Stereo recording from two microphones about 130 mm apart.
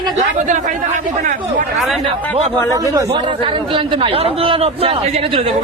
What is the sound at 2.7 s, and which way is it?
Speech, 25° right (ahead or behind).